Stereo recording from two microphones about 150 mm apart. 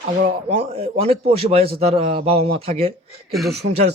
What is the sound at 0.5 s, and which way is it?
Speech, 40° right (ahead or behind).